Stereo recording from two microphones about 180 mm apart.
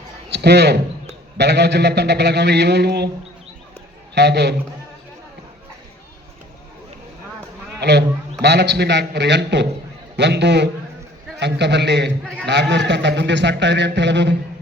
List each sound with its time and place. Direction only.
0.3 s a man's voice: 65° right (ahead or behind)
4.1 s a man's voice: 70° right (ahead or behind)
7.8 s a man's voice: 70° right (ahead or behind)